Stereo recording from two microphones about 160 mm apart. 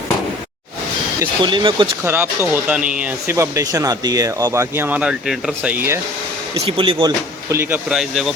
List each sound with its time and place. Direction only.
1.4 s speech: 30° right (ahead or behind)
2.0 s speech: 15° right (ahead or behind)
3.3 s speech: 20° right (ahead or behind)
6.5 s speech: 35° right (ahead or behind)
7.5 s speech: 15° right (ahead or behind)
7.9 s speech: centre (ahead or behind)